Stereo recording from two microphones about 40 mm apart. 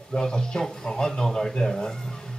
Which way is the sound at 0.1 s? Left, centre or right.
Centre.